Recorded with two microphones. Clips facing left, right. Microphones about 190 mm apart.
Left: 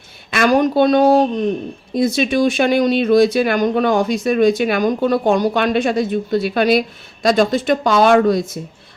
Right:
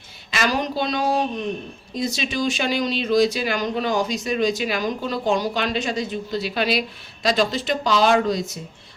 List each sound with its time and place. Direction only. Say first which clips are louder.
0.3 s speech: left 9 dB; 55° left (ahead or behind)